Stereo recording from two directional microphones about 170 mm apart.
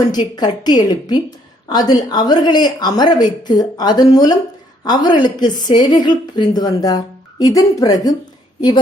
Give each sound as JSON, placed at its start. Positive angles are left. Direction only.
{"t": 0.1, "sound": "a woman's voice", "side_deg": 25}